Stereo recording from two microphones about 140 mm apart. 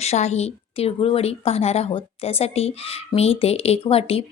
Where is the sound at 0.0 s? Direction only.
50° left (ahead or behind).